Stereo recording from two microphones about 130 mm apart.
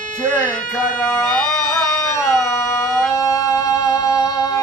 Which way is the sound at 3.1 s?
25° left (ahead or behind).